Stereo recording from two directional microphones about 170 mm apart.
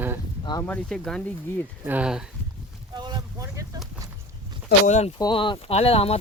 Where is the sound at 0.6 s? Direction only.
5° left (ahead or behind).